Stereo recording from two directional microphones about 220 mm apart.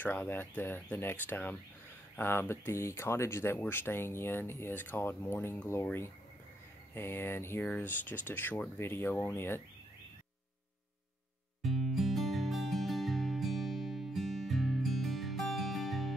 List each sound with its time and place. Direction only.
0.0 s speech: 10° left (ahead or behind)
11.6 s music: centre (ahead or behind)